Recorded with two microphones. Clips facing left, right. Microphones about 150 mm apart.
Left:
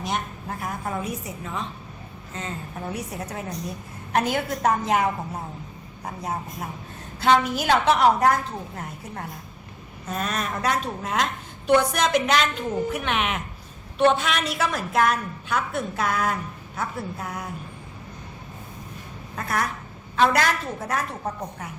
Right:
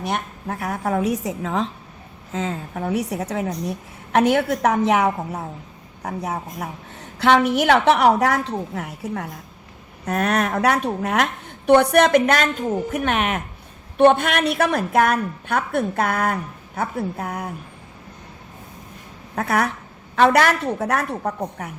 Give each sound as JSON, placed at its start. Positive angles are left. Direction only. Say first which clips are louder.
{"t": 0.0, "sound": "a woman's voice", "louder": "right 3 dB", "side_deg": -60}
{"t": 10.1, "sound": "a woman's voice", "louder": "right 7 dB", "side_deg": -70}
{"t": 19.4, "sound": "a woman's voice", "louder": "right 6 dB", "side_deg": -65}